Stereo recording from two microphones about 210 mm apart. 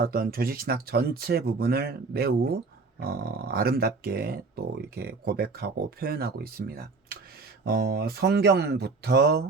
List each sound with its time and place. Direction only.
0.0 s speech: 45° right (ahead or behind)